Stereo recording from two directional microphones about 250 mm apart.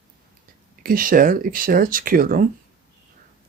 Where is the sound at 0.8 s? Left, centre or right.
Right.